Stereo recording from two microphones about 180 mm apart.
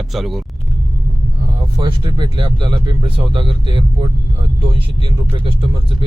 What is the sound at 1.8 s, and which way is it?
Speech, 25° right (ahead or behind).